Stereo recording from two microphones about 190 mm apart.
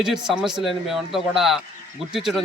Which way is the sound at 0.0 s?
Centre (ahead or behind).